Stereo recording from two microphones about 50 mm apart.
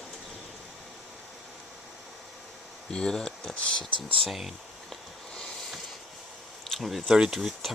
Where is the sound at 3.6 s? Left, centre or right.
Left.